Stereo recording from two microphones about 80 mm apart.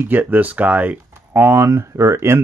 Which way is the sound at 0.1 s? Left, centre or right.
Right.